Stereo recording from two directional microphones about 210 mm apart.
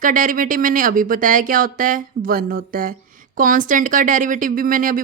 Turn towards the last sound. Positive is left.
turn(degrees=-40)  # may be behind; listen again after turning